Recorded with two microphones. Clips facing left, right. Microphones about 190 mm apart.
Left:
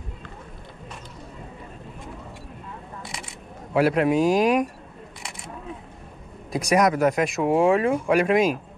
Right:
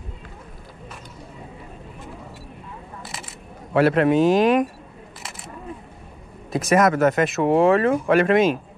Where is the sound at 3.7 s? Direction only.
Centre (ahead or behind).